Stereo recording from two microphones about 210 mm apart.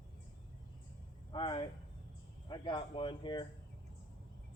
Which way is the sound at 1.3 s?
25° left (ahead or behind).